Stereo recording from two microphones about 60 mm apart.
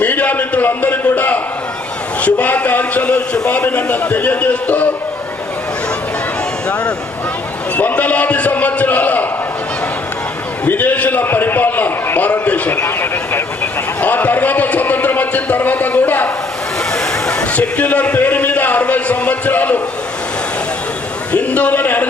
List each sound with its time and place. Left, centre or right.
0.0 s a sound: left
2.2 s a man's voice: left
3.7 s a man's voice: left
7.8 s a man's voice: left
10.7 s a man's voice: left
11.2 s a man's voice: left
12.8 s a man's voice: left
14.0 s a man's voice: left
16.9 s a sound: centre
17.7 s a man's voice: left
21.3 s a man's voice: left